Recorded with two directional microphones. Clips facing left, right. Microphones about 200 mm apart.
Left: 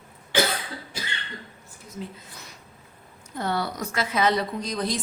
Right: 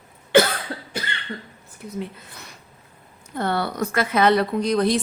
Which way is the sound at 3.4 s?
60° right (ahead or behind).